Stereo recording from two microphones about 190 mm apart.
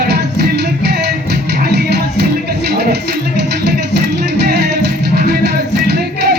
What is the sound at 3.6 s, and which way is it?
Music, 60° right (ahead or behind).